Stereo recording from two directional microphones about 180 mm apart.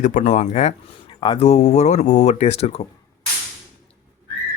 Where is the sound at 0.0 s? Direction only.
45° left (ahead or behind).